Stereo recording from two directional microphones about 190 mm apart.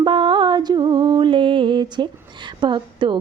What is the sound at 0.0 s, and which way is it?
Music, 25° right (ahead or behind).